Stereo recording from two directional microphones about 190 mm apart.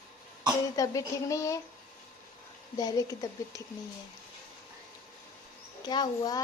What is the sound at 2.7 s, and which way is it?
Speech, 20° left (ahead or behind).